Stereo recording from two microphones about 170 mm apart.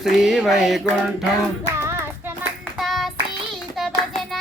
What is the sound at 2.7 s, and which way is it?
Child singing, centre (ahead or behind).